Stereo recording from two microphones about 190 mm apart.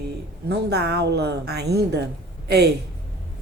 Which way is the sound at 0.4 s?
60° right (ahead or behind).